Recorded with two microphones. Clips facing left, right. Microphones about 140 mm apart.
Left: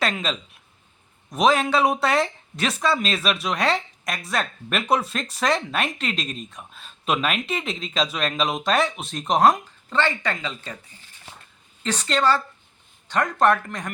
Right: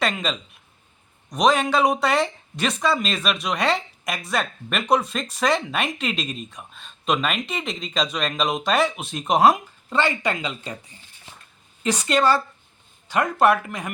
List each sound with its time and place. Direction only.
0.0 s speech: centre (ahead or behind); by 10.8 s 15° right (ahead or behind)
11.8 s speech: 10° right (ahead or behind)